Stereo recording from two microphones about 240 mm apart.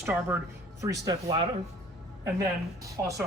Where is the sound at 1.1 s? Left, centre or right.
Centre.